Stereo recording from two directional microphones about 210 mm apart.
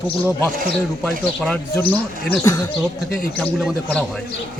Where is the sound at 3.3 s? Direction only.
5° left (ahead or behind).